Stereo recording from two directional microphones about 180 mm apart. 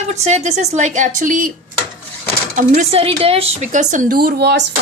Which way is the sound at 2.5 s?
40° right (ahead or behind).